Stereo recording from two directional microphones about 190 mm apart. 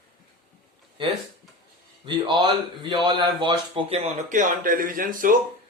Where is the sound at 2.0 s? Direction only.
25° right (ahead or behind); by 5.3 s 45° right (ahead or behind).